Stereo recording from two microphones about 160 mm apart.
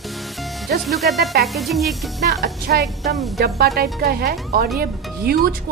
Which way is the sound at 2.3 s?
80° right.